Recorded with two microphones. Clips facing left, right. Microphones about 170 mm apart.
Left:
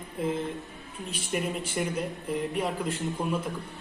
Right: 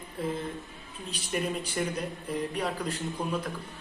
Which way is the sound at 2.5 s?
20° left (ahead or behind).